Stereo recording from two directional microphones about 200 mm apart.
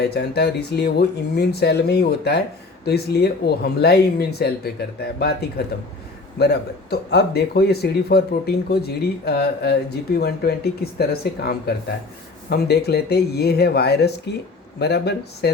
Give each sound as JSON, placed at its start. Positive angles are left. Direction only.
{"t": 0.0, "sound": "speech", "side_deg": 55}